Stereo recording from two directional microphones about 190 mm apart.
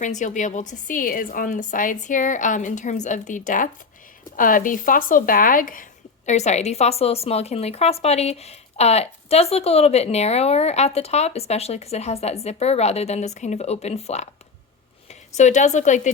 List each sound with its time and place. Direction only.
0.0 s a woman's voice: 40° left (ahead or behind)
15.4 s a woman's voice: 40° left (ahead or behind)